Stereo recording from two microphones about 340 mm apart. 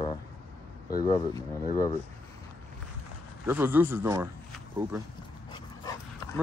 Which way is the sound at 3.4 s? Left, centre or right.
Centre.